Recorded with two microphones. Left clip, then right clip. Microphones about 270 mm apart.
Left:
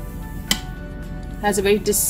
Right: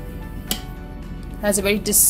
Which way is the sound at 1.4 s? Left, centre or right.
Centre.